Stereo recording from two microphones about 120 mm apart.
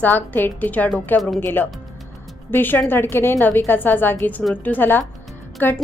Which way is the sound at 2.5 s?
15° left (ahead or behind).